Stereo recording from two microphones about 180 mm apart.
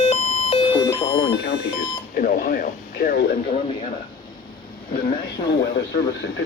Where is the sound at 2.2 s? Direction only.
55° left (ahead or behind).